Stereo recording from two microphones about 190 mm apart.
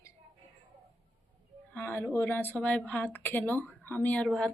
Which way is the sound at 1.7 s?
10° left (ahead or behind).